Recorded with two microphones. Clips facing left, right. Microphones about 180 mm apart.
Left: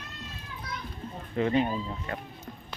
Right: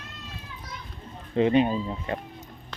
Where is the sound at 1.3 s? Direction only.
20° right (ahead or behind).